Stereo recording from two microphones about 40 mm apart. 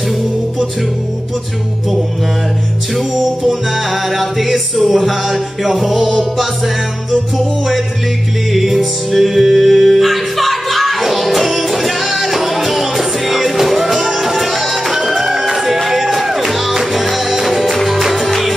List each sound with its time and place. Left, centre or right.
2.9 s music: centre